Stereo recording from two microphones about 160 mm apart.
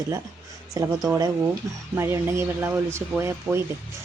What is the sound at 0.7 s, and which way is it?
Speech, 20° right (ahead or behind).